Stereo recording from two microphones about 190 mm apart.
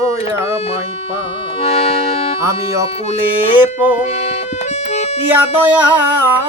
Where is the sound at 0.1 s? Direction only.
15° right (ahead or behind).